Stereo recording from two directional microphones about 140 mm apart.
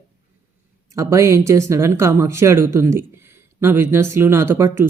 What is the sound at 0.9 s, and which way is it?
Speech, 20° right (ahead or behind).